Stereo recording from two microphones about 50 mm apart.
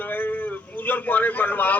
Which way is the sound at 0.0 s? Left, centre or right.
Left.